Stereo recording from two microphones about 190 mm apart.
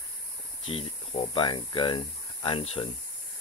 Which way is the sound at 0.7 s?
30° left (ahead or behind).